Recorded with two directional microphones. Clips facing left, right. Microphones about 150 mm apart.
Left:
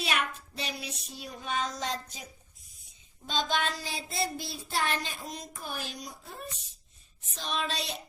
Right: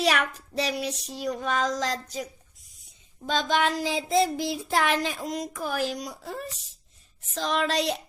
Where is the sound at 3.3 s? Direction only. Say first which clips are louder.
Right 6 dB; 75° right (ahead or behind).